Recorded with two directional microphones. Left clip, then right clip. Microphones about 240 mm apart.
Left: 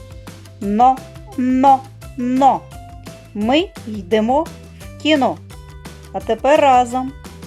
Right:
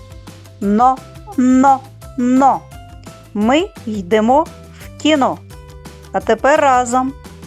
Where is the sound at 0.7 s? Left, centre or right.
Right.